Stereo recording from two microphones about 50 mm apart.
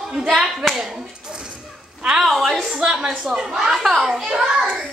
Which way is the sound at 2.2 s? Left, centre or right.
Centre.